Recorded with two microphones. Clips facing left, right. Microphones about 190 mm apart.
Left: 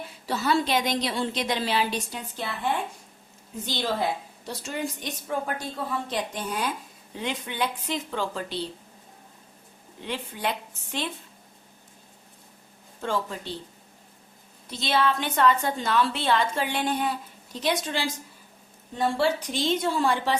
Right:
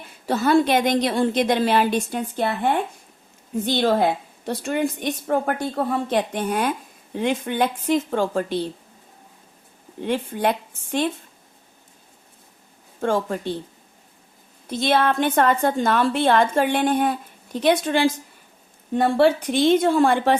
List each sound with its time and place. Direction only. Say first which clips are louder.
0.3 s a woman's voice: right 7 dB; 50° right (ahead or behind)
10.0 s a woman's voice: right 9 dB; 50° right (ahead or behind)
13.0 s a woman's voice: right 7 dB; 50° right (ahead or behind)
14.7 s a woman's voice: right 5 dB; 50° right (ahead or behind)